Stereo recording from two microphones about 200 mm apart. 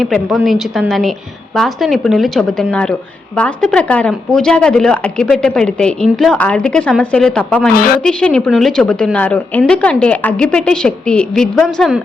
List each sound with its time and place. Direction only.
0.0 s speech: centre (ahead or behind)
7.7 s a woman's voice: 45° left (ahead or behind)
8.0 s speech: 5° left (ahead or behind)